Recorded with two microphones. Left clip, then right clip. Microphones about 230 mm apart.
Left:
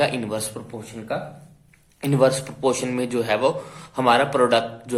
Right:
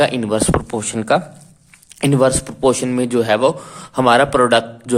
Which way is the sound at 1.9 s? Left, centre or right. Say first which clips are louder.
Right 4 dB; right.